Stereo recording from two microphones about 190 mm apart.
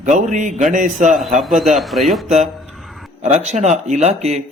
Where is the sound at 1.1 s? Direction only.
Centre (ahead or behind).